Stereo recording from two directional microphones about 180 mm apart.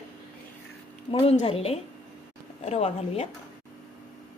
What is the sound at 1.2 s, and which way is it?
Speech, 35° left (ahead or behind).